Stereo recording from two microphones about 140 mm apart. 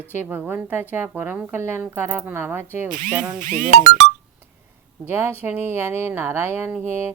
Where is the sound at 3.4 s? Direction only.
75° right (ahead or behind).